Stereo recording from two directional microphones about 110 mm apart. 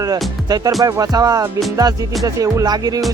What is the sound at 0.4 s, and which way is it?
Speech, 35° right (ahead or behind).